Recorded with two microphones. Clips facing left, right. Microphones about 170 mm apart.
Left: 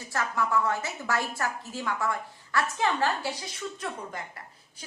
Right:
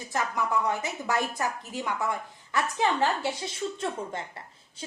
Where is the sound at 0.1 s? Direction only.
20° right (ahead or behind).